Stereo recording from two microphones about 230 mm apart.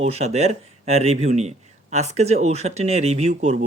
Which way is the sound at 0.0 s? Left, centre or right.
Right.